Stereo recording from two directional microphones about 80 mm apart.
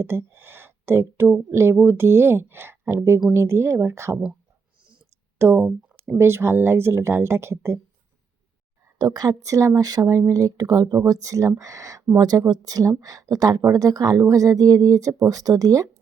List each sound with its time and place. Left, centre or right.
0.0 s speech: right
5.4 s speech: right
9.0 s speech: right